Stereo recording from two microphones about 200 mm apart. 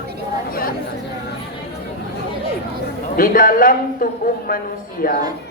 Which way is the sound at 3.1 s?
45° left (ahead or behind).